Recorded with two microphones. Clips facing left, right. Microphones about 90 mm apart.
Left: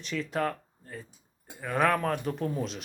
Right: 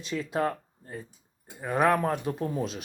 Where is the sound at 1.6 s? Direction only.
20° right (ahead or behind).